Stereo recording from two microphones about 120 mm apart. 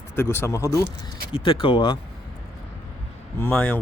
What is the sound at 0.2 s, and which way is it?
Speech, 20° left (ahead or behind).